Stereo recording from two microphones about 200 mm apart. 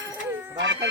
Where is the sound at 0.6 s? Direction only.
65° right (ahead or behind).